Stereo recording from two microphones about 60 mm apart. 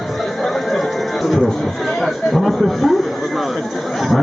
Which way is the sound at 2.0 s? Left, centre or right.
Centre.